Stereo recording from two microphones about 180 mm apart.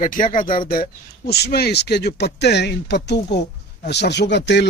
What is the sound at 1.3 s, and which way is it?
Speech, 60° left (ahead or behind).